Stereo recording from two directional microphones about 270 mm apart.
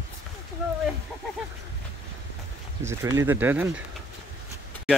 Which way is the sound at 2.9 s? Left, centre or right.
Centre.